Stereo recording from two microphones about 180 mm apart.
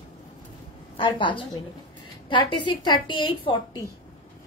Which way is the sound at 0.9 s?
25° left (ahead or behind).